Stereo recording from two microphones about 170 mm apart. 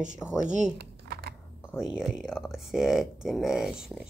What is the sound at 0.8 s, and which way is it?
Typing, 75° right (ahead or behind).